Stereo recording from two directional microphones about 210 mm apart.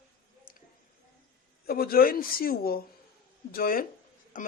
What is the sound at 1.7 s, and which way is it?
Speech, 45° left (ahead or behind).